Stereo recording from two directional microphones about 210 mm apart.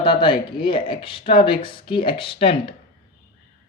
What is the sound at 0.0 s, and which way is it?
Speech, 25° left (ahead or behind).